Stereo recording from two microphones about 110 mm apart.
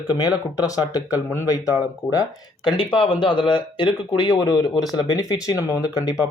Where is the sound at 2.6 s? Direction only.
50° left (ahead or behind).